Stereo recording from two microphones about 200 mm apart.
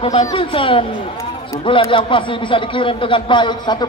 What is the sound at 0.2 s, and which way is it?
A man's voice, 20° left (ahead or behind).